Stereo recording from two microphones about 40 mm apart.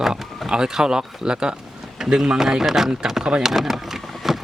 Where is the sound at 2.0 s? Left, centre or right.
Centre.